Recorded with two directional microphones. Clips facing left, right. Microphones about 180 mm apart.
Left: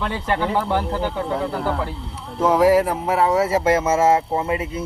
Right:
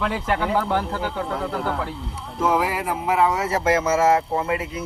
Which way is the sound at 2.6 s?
40° left (ahead or behind).